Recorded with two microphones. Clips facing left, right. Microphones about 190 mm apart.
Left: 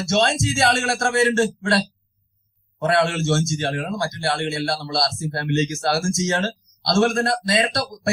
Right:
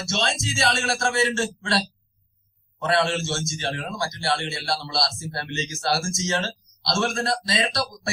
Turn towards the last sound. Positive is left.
turn(degrees=55)  # may be behind; listen again after turning